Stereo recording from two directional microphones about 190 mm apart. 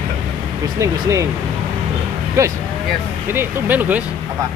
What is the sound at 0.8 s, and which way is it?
Speech, 15° right (ahead or behind).